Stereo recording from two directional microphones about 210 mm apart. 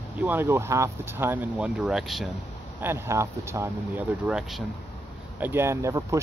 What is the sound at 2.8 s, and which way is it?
Speech, 10° right (ahead or behind).